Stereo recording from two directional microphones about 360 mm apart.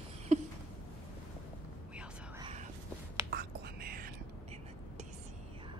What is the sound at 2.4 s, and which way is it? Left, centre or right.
Whispering, centre.